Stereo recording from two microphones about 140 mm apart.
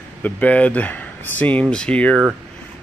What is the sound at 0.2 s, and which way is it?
Speech, 10° left (ahead or behind).